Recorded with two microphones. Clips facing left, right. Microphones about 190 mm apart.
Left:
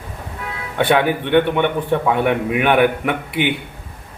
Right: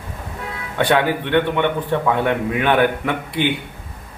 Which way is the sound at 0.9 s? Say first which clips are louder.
Left 2 dB; 15° left (ahead or behind).